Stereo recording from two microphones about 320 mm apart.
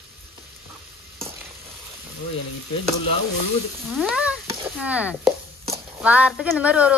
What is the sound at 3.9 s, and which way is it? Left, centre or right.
A woman's voice, centre.